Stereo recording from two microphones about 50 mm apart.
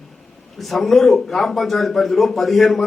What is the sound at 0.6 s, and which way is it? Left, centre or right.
A man's voice, centre.